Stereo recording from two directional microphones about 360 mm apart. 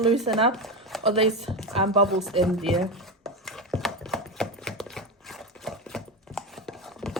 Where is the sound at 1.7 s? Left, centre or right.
Centre.